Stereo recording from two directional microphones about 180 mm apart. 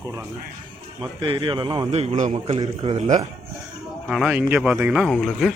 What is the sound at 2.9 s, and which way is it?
Speech, 40° right (ahead or behind).